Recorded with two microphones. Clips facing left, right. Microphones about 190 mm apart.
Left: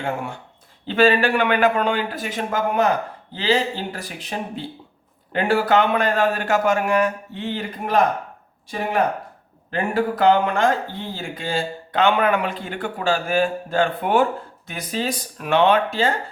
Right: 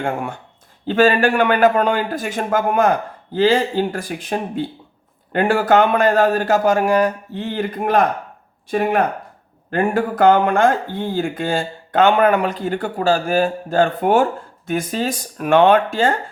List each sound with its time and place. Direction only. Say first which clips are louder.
0.0 s a man's voice: right 3 dB; 50° right (ahead or behind)
7.5 s speech: right 4 dB; 55° right (ahead or behind)
9.7 s speech: right 4 dB; 50° right (ahead or behind)